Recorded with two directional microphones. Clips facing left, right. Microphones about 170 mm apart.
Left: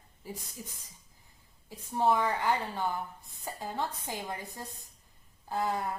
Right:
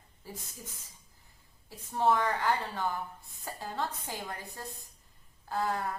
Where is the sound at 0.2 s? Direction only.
15° left (ahead or behind).